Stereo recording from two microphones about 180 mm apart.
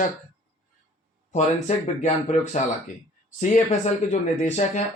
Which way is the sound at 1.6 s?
40° left (ahead or behind).